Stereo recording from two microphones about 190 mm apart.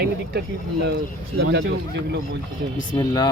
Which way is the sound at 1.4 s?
65° right (ahead or behind).